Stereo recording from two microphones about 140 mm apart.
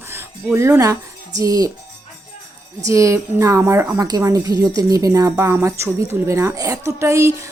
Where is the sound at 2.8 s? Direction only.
20° right (ahead or behind).